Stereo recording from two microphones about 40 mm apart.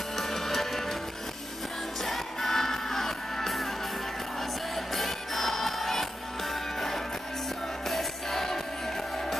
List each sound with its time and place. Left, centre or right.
0.2 s music: centre
2.0 s music: centre
4.9 s music: centre